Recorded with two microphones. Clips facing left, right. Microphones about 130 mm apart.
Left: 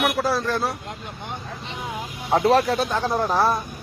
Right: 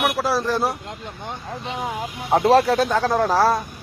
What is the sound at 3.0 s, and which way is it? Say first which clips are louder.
Speech: right 3 dB; 90° right.